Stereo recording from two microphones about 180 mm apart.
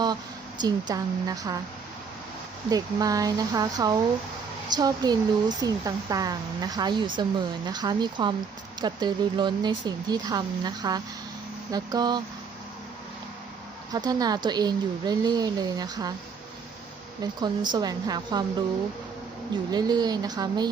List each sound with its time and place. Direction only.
0.6 s speech: 20° right (ahead or behind)
2.6 s speech: 20° right (ahead or behind)
13.9 s speech: 20° right (ahead or behind)
17.4 s speech: 25° right (ahead or behind)
19.7 s speech: 20° right (ahead or behind)